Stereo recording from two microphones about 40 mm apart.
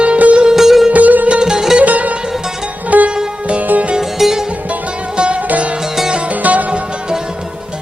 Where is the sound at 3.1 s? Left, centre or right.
Right.